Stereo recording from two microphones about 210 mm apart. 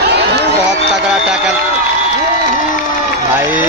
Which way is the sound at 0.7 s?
5° right (ahead or behind).